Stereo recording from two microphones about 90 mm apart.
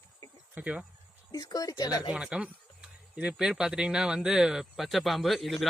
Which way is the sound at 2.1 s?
10° right (ahead or behind).